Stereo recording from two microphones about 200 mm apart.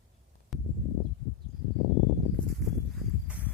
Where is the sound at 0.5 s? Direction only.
Centre (ahead or behind).